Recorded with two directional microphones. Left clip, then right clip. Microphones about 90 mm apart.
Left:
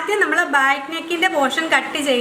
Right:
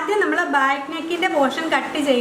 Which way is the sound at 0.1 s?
20° left (ahead or behind).